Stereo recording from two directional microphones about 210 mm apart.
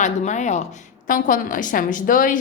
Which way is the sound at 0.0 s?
35° left (ahead or behind).